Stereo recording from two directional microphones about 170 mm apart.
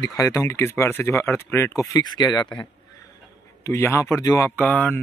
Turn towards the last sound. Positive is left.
turn(degrees=10)  # may be behind; listen again after turning